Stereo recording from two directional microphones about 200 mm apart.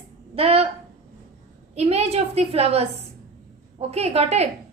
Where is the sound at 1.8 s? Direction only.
30° right (ahead or behind).